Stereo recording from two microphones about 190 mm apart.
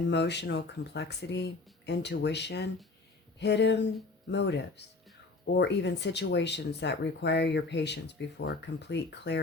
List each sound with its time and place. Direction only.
0.1 s speech: 65° left (ahead or behind)